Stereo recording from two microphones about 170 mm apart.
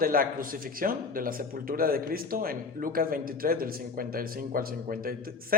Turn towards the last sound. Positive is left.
turn(degrees=-60)  # may be behind; listen again after turning